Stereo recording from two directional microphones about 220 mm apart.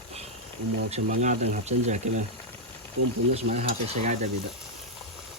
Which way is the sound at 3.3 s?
30° right (ahead or behind).